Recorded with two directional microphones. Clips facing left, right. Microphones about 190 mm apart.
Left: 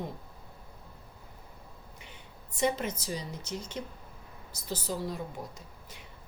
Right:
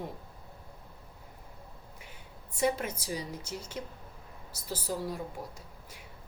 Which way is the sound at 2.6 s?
10° right (ahead or behind).